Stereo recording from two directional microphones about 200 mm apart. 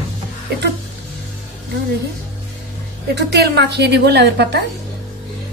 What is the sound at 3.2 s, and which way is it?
A woman's voice, 55° right (ahead or behind).